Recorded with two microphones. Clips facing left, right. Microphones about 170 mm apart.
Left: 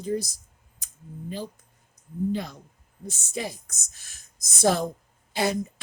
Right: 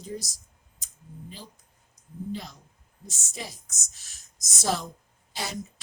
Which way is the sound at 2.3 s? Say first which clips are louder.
Left 6 dB; 60° left (ahead or behind).